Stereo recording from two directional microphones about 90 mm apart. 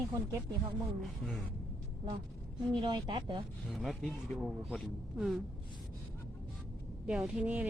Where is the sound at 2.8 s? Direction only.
65° right (ahead or behind).